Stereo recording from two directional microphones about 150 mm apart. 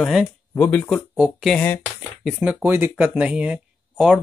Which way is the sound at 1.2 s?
5° right (ahead or behind).